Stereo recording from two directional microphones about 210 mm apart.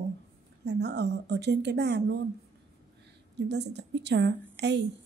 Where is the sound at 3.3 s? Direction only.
55° right (ahead or behind).